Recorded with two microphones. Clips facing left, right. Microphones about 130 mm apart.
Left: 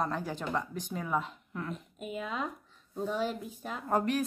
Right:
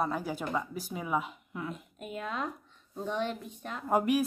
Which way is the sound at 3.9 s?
10° right (ahead or behind).